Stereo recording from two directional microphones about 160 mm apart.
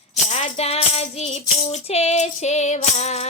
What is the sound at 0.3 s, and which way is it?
Music, 45° left (ahead or behind).